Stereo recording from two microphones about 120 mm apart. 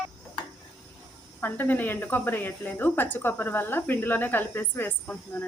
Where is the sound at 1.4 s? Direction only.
15° left (ahead or behind).